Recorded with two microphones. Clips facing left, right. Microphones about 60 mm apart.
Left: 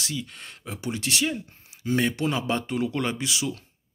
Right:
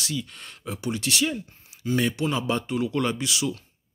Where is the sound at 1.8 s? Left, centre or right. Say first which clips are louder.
Even; left.